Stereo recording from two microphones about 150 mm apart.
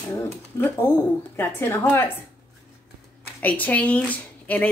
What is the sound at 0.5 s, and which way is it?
Speech, 15° left (ahead or behind).